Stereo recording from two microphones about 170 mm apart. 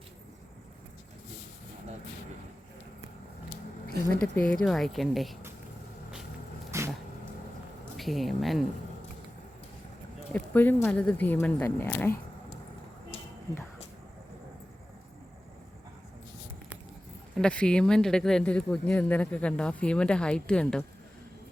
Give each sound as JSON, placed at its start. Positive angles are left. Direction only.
{"t": 4.2, "sound": "speech", "side_deg": 5}
{"t": 6.7, "sound": "vehicle", "side_deg": -15}
{"t": 7.9, "sound": "speech", "side_deg": 0}
{"t": 10.3, "sound": "speech", "side_deg": 10}
{"t": 17.3, "sound": "speech", "side_deg": 5}